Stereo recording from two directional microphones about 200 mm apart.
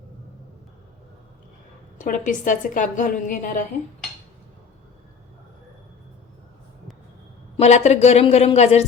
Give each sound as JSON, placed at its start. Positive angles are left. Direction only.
{"t": 2.0, "sound": "a woman's voice", "side_deg": 40}
{"t": 7.5, "sound": "a woman's voice", "side_deg": 35}